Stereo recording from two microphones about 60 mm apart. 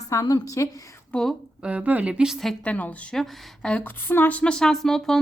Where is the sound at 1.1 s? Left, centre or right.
Centre.